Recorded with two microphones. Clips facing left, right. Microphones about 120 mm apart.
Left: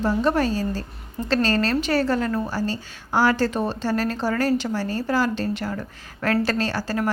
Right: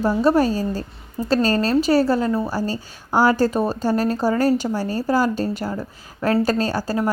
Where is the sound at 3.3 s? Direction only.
40° right (ahead or behind).